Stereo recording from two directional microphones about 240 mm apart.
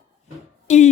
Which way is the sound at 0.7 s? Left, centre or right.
Left.